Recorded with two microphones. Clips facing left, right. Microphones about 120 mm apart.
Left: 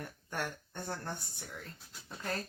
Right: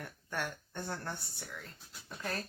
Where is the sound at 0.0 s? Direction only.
15° left (ahead or behind).